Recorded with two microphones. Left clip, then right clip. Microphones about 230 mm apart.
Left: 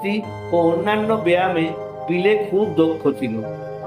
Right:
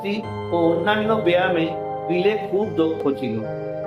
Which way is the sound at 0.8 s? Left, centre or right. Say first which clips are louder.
Left 1 dB; left.